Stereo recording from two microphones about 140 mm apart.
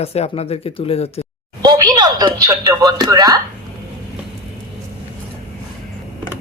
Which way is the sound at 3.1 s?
25° right (ahead or behind).